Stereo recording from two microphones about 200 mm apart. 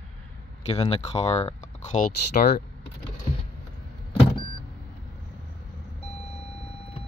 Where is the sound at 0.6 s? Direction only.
30° left (ahead or behind); by 2.6 s 50° left (ahead or behind).